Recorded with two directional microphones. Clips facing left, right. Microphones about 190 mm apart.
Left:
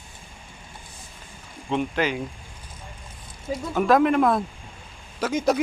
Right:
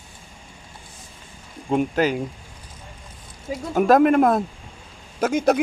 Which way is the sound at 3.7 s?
45° right (ahead or behind).